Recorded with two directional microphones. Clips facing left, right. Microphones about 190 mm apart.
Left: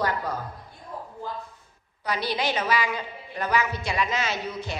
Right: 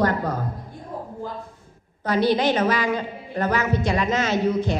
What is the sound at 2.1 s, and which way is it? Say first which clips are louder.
Speech: right 8 dB; 10° left (ahead or behind).